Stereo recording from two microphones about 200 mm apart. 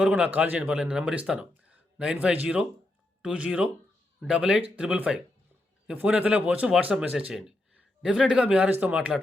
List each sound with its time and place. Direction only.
0.0 s speech: 5° right (ahead or behind)